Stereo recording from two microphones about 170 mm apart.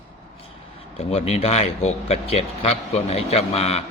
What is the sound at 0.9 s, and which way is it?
Speech, 40° left (ahead or behind).